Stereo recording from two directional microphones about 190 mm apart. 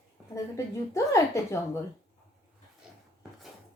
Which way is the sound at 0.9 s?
15° left (ahead or behind).